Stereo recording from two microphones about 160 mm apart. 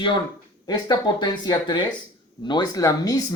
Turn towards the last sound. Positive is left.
turn(degrees=20)  # may be behind; listen again after turning